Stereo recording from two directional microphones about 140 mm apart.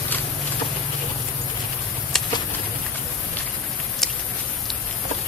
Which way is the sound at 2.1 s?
5° left (ahead or behind).